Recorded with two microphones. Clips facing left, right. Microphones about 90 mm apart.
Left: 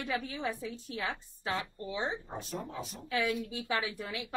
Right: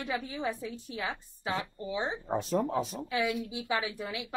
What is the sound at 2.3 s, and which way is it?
Speech, 80° right.